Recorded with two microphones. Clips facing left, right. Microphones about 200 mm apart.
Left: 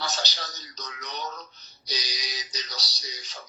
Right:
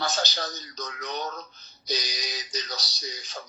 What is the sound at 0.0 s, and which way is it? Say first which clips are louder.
Speech: right 4 dB; 50° right (ahead or behind).